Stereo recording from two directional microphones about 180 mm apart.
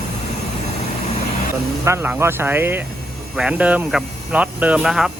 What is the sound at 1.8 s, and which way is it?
Speech, 15° right (ahead or behind).